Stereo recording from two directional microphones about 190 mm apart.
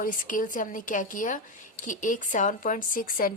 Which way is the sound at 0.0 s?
45° left (ahead or behind).